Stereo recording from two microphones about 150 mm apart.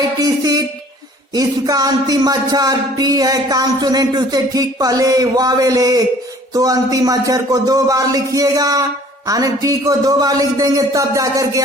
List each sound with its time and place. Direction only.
0.2 s speech: 25° right (ahead or behind)